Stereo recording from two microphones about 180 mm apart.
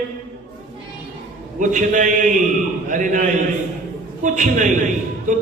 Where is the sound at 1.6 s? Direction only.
45° right (ahead or behind).